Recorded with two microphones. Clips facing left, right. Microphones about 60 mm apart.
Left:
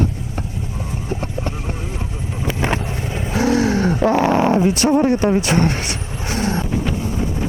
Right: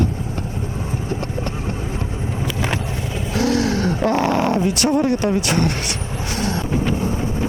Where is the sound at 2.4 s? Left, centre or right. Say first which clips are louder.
Left 4 dB; left.